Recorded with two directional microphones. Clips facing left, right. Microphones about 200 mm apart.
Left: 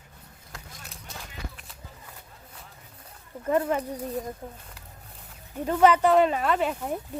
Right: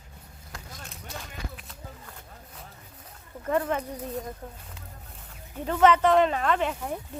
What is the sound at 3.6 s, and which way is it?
Speech, 10° left (ahead or behind).